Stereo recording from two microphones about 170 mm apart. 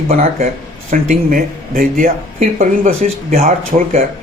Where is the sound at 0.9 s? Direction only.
55° right (ahead or behind).